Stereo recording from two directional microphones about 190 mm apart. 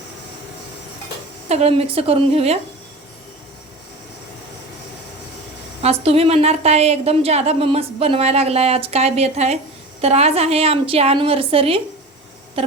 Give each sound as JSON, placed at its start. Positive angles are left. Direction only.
{"t": 1.5, "sound": "a woman's voice", "side_deg": -35}
{"t": 5.8, "sound": "a woman's voice", "side_deg": -30}